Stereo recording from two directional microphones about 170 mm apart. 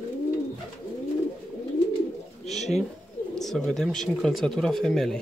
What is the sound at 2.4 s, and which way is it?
Bird, 40° left (ahead or behind).